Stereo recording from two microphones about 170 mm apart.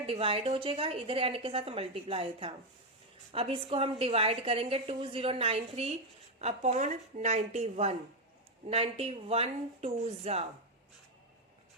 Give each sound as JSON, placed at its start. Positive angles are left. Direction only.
{"t": 0.0, "sound": "a woman's voice", "side_deg": -35}